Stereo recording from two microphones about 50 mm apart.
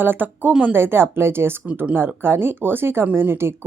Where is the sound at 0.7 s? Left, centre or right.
Right.